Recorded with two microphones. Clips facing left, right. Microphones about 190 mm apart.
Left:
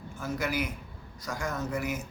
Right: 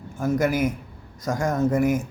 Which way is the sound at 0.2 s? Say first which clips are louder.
Right 10 dB; 50° right (ahead or behind).